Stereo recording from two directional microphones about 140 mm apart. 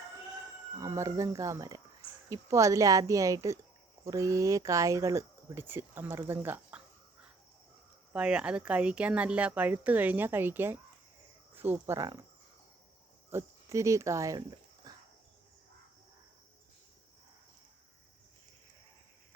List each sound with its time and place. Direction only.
0.8 s speech: 20° right (ahead or behind)
8.1 s speech: 5° right (ahead or behind)
13.3 s speech: 20° right (ahead or behind)